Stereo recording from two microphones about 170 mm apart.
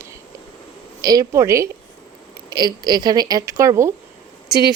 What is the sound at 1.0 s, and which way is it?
Speech, 20° right (ahead or behind).